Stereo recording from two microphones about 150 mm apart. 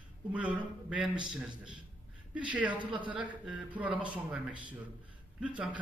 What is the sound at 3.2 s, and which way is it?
A man's voice, 10° right (ahead or behind).